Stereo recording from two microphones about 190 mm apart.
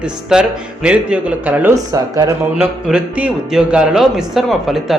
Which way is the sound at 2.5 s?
5° right (ahead or behind).